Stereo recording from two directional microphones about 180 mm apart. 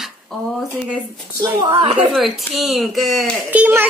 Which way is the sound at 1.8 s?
35° right (ahead or behind).